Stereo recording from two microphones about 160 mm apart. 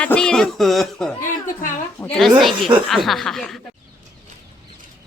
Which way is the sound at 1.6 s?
55° left (ahead or behind).